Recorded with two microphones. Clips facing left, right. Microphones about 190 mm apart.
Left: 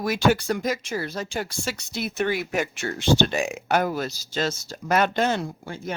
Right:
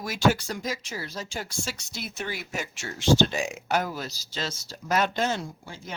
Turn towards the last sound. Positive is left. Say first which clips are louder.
# left 7 dB
turn(degrees=60)  # may be behind; listen again after turning